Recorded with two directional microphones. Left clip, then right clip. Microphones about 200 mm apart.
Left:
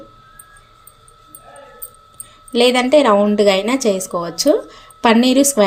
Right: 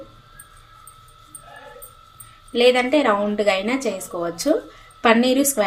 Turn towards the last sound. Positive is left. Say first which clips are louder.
# left 5 dB
turn(degrees=45)  # may be behind; listen again after turning